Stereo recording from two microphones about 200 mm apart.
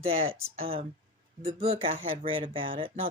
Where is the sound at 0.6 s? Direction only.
30° right (ahead or behind).